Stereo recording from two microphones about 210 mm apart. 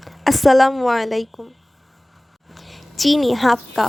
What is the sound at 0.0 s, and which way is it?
A woman's voice, centre (ahead or behind).